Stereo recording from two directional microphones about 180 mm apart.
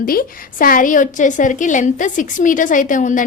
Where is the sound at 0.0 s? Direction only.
55° left (ahead or behind).